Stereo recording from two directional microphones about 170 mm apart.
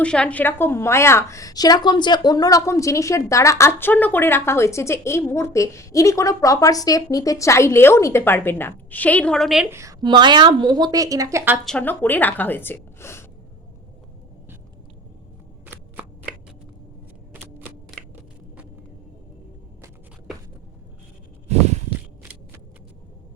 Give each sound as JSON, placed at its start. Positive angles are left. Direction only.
{"t": 0.0, "sound": "a woman's voice", "side_deg": 5}
{"t": 9.6, "sound": "a woman's voice", "side_deg": -15}
{"t": 11.6, "sound": "a woman's voice", "side_deg": 5}
{"t": 15.6, "sound": "shuffling cards", "side_deg": -10}
{"t": 17.3, "sound": "a sound", "side_deg": -10}
{"t": 21.4, "sound": "a sound", "side_deg": -40}